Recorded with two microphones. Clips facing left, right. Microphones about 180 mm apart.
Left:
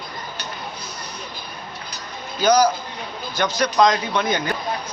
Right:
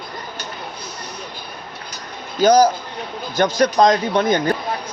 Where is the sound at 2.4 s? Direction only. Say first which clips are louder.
Right 4 dB; 45° right (ahead or behind).